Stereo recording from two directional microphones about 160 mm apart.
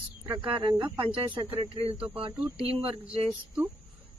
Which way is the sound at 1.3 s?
10° right (ahead or behind).